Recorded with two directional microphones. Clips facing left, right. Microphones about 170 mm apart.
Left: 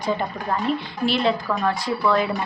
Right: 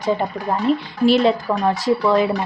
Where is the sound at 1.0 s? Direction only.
40° right (ahead or behind).